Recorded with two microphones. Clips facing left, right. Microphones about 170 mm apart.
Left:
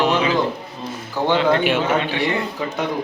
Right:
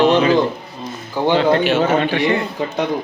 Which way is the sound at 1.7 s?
45° right (ahead or behind).